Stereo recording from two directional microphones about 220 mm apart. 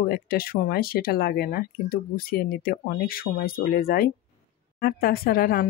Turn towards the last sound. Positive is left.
turn(degrees=40)  # may be behind; listen again after turning